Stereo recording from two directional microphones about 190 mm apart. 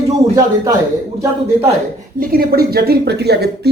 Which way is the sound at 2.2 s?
55° right (ahead or behind).